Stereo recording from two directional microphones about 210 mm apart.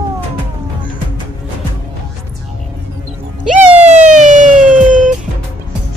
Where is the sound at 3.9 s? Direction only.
35° right (ahead or behind).